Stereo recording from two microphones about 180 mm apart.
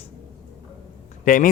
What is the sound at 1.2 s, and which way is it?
Speech, 50° left (ahead or behind).